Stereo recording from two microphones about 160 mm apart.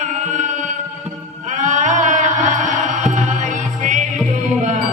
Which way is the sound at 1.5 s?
50° right (ahead or behind).